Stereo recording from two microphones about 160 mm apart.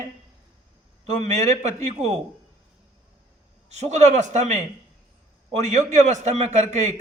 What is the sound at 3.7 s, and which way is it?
A man's voice, 45° right (ahead or behind).